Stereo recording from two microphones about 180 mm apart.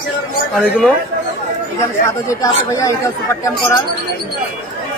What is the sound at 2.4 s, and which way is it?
Speech, 20° left (ahead or behind).